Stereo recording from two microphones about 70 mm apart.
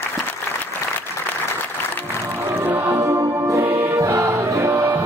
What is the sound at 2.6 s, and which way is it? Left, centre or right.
Music, right.